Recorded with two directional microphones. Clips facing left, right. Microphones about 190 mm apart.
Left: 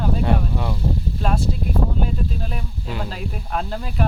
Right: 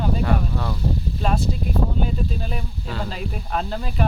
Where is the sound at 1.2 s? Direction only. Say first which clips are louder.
Right 1 dB; centre (ahead or behind).